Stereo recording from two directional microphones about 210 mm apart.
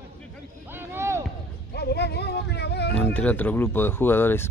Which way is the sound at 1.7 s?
50° left (ahead or behind).